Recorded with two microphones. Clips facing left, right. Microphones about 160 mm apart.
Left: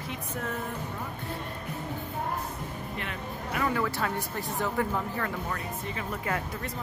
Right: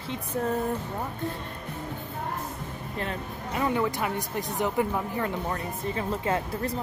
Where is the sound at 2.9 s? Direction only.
30° right (ahead or behind).